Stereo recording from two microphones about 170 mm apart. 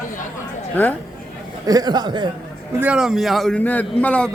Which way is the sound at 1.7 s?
25° right (ahead or behind).